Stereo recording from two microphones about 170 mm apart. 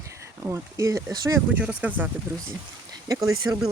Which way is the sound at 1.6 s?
10° right (ahead or behind).